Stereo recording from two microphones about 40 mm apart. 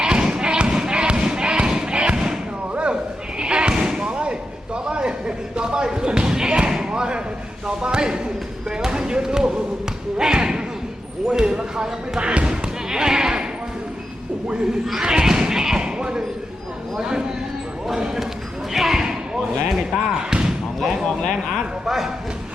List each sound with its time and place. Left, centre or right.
0.0 s thump: right
2.7 s slam: right
5.5 s basketball bounce: right
7.8 s a sound: centre
8.7 s basketball bounce: centre
10.2 s slam: centre
11.3 s basketball bounce: centre
14.4 s a sound: right
18.7 s slam: centre
21.5 s a sound: centre